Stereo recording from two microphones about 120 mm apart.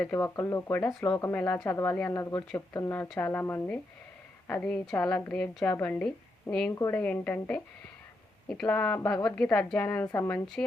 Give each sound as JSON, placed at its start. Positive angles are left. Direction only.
{"t": 0.0, "sound": "a woman's voice", "side_deg": 20}
{"t": 1.5, "sound": "a woman's voice", "side_deg": 25}
{"t": 6.7, "sound": "speech", "side_deg": 25}
{"t": 6.9, "sound": "a woman's voice", "side_deg": 15}